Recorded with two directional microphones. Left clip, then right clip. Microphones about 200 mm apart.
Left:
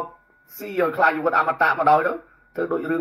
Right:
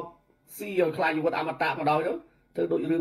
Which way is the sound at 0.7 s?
15° left (ahead or behind).